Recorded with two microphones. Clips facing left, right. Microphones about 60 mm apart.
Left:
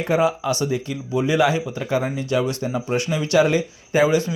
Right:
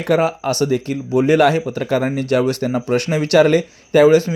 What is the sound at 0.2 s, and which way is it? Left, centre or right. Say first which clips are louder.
Speech: right 3 dB; right.